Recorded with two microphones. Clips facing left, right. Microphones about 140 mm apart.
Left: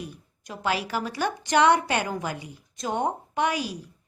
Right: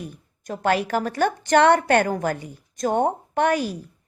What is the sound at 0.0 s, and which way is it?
A woman's voice, 50° right (ahead or behind).